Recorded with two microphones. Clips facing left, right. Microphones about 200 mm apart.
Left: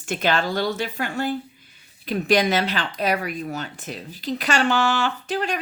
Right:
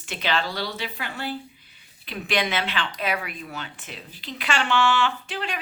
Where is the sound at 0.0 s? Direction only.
45° left (ahead or behind).